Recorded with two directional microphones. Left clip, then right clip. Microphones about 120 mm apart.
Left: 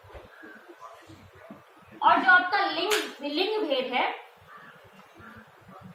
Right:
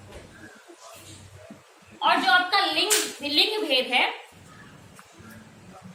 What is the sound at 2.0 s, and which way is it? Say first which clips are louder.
A woman's voice: left 1 dB; 30° right (ahead or behind).